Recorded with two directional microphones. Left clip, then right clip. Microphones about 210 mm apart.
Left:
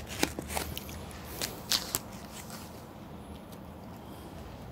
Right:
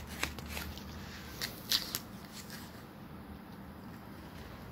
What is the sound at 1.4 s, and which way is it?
Shuffling cards, 30° left (ahead or behind).